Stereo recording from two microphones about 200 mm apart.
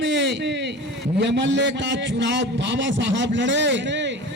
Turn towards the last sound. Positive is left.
turn(degrees=-60)  # may be behind; listen again after turning